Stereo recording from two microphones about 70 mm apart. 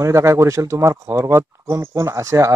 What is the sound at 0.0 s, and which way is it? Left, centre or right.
Speech, right.